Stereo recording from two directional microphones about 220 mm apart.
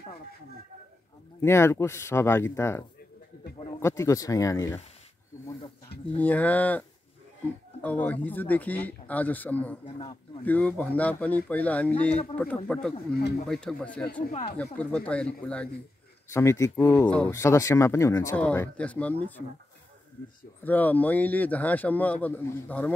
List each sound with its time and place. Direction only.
1.4 s speech: 10° left (ahead or behind)
3.8 s speech: 15° left (ahead or behind)
6.1 s speech: 5° left (ahead or behind)
7.8 s speech: 5° left (ahead or behind)
9.8 s speech: 25° left (ahead or behind)
10.4 s speech: 5° left (ahead or behind)
20.6 s speech: 10° left (ahead or behind)